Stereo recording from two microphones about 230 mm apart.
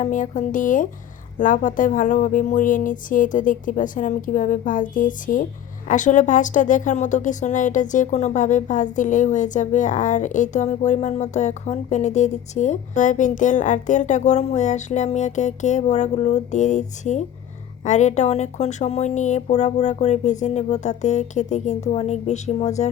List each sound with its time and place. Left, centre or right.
0.0 s a woman's voice: left